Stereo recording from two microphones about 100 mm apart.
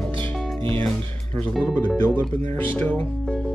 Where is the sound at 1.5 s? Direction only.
Centre (ahead or behind).